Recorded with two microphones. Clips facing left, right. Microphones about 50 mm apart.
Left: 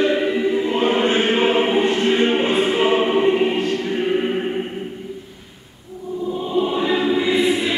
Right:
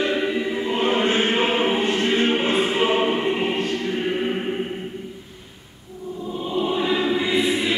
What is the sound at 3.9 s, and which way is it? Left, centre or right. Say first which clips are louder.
Choir: left 3 dB; centre.